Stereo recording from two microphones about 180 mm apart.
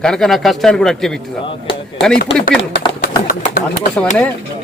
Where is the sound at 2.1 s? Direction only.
55° left (ahead or behind).